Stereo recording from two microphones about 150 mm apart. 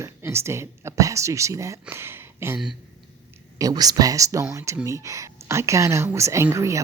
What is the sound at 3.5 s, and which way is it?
A woman's voice, 25° right (ahead or behind).